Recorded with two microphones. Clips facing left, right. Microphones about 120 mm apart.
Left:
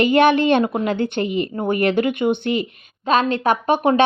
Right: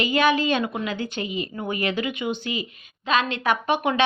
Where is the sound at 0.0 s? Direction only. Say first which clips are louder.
Left 6 dB; 60° left (ahead or behind).